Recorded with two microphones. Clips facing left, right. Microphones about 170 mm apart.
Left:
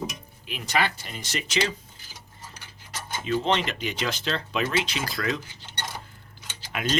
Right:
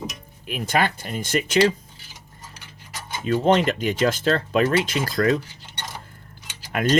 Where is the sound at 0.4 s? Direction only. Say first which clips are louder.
Right 4 dB; 50° right (ahead or behind).